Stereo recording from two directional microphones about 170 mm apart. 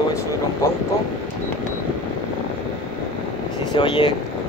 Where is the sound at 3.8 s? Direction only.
30° left (ahead or behind).